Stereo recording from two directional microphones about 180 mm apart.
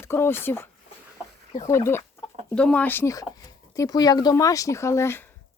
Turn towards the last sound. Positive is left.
turn(degrees=15)  # may be behind; listen again after turning